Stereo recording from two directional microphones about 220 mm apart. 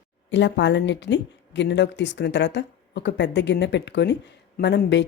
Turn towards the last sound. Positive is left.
turn(degrees=50)  # may be behind; listen again after turning